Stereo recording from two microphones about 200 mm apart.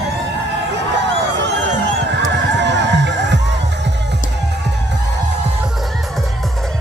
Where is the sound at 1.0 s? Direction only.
65° right (ahead or behind).